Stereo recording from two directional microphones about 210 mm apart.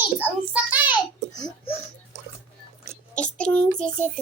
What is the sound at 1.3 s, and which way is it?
Speech, 20° left (ahead or behind).